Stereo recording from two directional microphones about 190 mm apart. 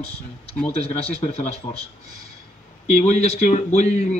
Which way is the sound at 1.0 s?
35° left (ahead or behind).